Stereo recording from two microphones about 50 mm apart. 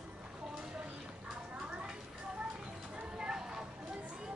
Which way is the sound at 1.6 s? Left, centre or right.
Centre.